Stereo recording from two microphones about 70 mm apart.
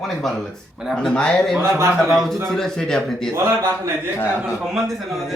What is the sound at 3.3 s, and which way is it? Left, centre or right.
Speech, right.